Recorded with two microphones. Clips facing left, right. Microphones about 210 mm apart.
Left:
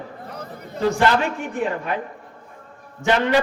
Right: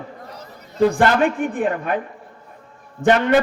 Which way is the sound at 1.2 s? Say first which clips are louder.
Right 5 dB; 50° right (ahead or behind).